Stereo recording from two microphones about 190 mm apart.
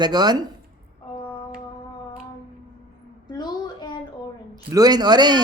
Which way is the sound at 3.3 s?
20° left (ahead or behind).